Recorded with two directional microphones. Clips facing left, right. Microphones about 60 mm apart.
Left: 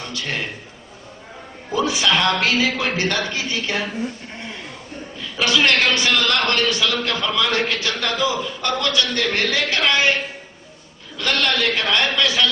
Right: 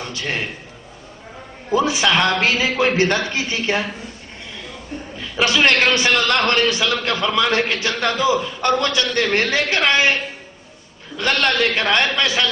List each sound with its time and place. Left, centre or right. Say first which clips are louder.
0.0 s a man's voice: right 2 dB; right
1.7 s a man's voice: right 2 dB; right
5.4 s a man's voice: right 2 dB; right
11.2 s a man's voice: right 3 dB; right